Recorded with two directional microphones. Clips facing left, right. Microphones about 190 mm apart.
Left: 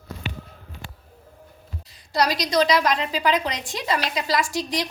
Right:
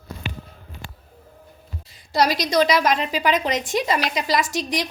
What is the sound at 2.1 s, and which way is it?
A woman's voice, 25° right (ahead or behind).